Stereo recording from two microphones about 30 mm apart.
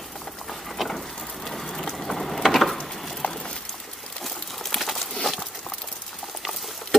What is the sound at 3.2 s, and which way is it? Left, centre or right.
Boat, left.